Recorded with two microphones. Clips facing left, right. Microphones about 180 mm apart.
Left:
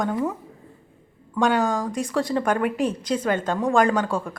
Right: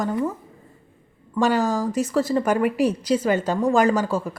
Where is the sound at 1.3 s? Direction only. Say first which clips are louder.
Right 1 dB; 5° right (ahead or behind).